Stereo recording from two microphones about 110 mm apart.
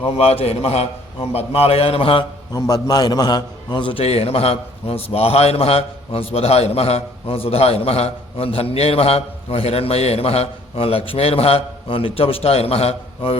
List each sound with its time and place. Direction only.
0.0 s a man's voice: 65° left (ahead or behind)
2.5 s a man's voice: 35° left (ahead or behind)
4.0 s a man's voice: 65° left (ahead or behind)